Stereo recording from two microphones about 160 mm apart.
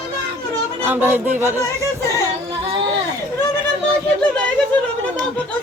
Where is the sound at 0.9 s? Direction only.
10° right (ahead or behind).